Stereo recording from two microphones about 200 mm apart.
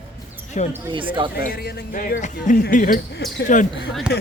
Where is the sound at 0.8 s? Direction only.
25° right (ahead or behind).